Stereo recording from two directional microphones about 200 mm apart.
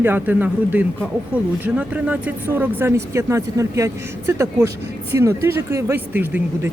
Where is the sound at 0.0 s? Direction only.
10° right (ahead or behind).